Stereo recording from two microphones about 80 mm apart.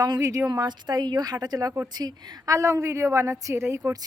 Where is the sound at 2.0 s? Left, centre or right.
Right.